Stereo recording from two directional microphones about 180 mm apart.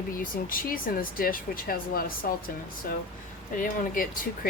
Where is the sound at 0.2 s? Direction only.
50° left (ahead or behind).